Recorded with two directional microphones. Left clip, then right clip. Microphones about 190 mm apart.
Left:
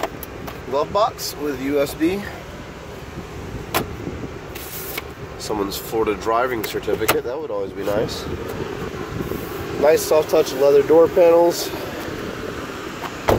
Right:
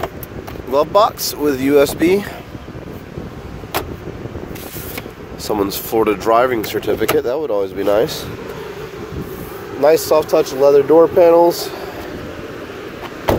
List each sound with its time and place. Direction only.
0.7 s speech: 50° right (ahead or behind)
5.5 s speech: 40° right (ahead or behind)
9.8 s speech: 30° right (ahead or behind); by 11.7 s 15° right (ahead or behind)